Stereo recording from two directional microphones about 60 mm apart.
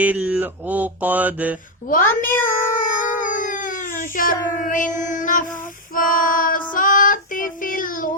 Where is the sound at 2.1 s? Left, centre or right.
Left.